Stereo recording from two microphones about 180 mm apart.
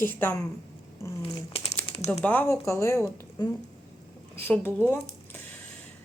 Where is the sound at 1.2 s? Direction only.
30° left (ahead or behind).